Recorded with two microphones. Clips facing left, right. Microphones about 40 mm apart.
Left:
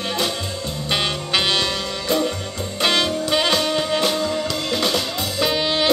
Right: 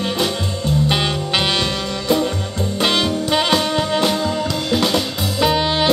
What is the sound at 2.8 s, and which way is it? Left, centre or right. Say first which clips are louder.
Music: right 1 dB; centre.